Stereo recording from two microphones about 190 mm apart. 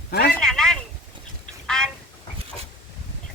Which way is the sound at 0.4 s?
5° left (ahead or behind).